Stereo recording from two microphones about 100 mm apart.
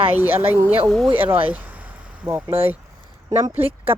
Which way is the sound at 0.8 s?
5° left (ahead or behind).